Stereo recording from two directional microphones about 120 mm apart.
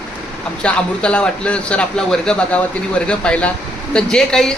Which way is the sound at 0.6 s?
10° left (ahead or behind).